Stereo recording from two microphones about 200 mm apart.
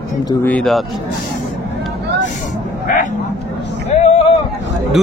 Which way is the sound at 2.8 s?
45° left (ahead or behind).